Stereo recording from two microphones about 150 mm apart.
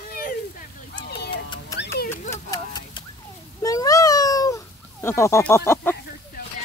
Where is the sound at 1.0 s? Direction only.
90° left.